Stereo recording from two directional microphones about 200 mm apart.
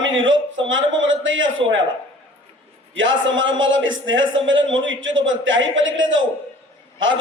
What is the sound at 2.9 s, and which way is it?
A man's voice, 70° right (ahead or behind).